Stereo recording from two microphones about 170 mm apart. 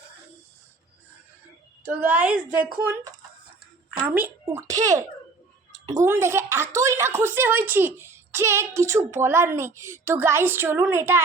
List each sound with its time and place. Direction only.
1.8 s a woman's voice: 10° right (ahead or behind)
4.0 s a woman's voice: 10° right (ahead or behind)
6.1 s a woman's voice: 15° right (ahead or behind)